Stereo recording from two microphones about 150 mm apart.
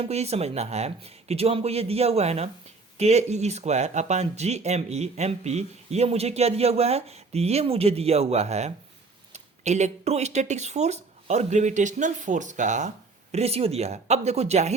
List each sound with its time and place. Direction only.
0.0 s speech: 45° right (ahead or behind)
13.3 s speech: 45° right (ahead or behind)